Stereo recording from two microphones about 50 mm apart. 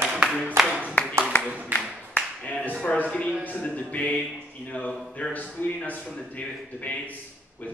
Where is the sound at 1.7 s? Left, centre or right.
Right.